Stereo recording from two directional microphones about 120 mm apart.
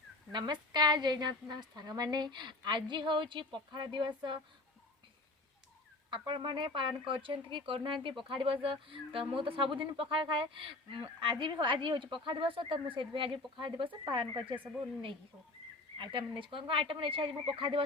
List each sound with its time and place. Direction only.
0.3 s a woman's voice: 35° right (ahead or behind)
6.1 s speech: 45° right (ahead or behind)
16.0 s speech: 40° right (ahead or behind)